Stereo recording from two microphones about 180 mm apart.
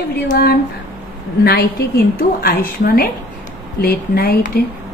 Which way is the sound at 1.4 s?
60° left (ahead or behind).